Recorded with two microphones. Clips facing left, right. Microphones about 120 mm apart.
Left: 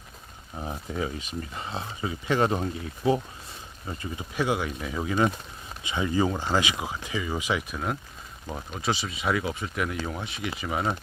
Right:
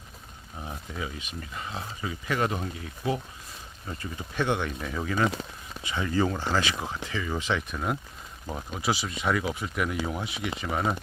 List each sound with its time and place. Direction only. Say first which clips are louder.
0.6 s speech: left 5 dB; 35° left (ahead or behind)
3.8 s speech: left 2 dB; 15° left (ahead or behind)
5.0 s speech: left 2 dB; 15° left (ahead or behind); by 10.9 s centre (ahead or behind)